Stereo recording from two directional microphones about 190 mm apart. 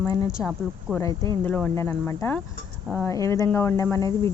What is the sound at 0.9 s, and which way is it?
Speech, 5° right (ahead or behind).